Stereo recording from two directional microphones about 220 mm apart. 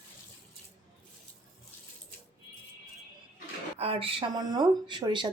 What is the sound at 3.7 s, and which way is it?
Speech, 25° right (ahead or behind).